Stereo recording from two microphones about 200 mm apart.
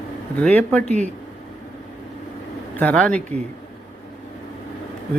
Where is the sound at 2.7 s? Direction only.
5° left (ahead or behind).